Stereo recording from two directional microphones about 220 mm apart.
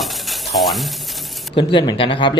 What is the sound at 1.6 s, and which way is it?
Speech, 20° left (ahead or behind).